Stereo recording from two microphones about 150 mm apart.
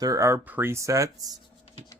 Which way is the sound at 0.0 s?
20° right (ahead or behind).